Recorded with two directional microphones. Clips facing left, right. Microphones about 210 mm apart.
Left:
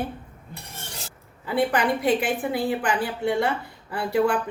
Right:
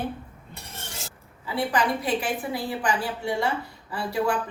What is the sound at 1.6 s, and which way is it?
A woman's voice, 60° left (ahead or behind).